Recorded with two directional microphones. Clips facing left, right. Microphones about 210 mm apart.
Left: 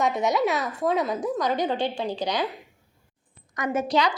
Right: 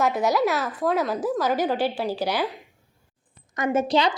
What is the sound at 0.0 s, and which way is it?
A woman's voice, centre (ahead or behind).